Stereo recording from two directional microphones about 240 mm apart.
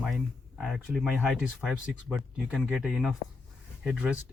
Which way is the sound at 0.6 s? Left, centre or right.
Centre.